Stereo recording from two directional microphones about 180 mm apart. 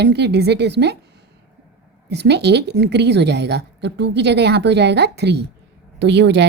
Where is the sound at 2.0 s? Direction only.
70° right (ahead or behind).